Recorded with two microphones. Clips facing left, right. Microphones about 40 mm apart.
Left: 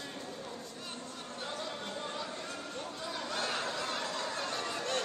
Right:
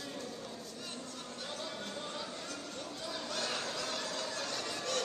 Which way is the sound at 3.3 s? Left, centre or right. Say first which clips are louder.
Left 3 dB; left.